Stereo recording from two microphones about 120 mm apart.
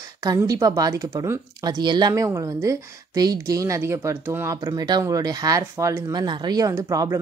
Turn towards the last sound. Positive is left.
turn(degrees=-30)  # may be behind; listen again after turning